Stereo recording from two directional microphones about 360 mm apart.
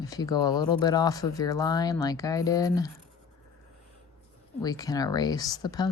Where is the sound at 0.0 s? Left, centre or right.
Centre.